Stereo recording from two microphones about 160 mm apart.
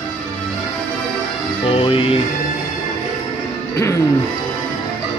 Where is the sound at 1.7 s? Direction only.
35° left (ahead or behind).